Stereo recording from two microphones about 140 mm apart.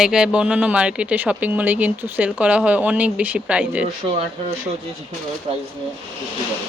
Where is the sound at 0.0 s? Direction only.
5° right (ahead or behind).